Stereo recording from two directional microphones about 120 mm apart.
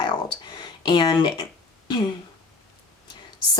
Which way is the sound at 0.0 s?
40° left (ahead or behind).